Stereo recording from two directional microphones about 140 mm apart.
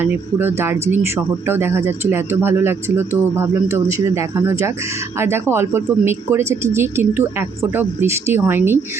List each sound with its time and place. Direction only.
0.0 s speech: 15° right (ahead or behind)